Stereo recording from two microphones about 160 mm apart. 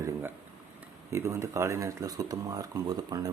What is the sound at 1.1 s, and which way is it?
Speech, 20° right (ahead or behind).